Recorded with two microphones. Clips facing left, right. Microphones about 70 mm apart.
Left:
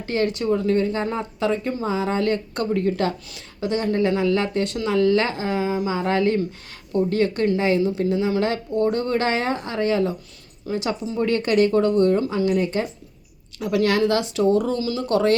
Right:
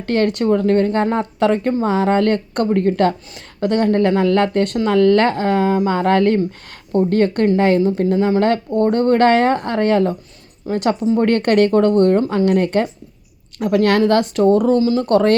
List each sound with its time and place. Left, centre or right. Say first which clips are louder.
0.0 s speech: right 6 dB; right
11.3 s speech: right 2 dB; right
13.6 s speech: right 5 dB; right
15.0 s speech: right 1 dB; right